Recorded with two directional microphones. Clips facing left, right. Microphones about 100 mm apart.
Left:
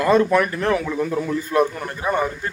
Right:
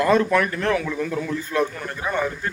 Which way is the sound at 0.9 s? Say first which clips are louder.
Left 3 dB; 25° left (ahead or behind).